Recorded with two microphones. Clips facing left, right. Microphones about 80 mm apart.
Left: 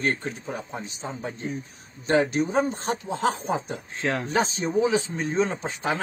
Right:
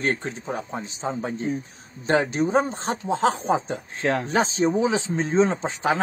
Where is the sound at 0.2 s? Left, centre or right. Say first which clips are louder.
Right 3 dB; right.